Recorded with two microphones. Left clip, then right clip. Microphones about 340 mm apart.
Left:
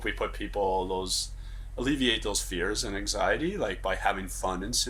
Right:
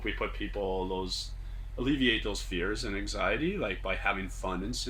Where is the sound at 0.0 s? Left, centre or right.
Left.